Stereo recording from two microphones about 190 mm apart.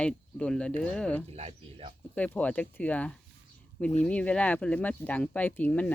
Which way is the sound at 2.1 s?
5° left (ahead or behind).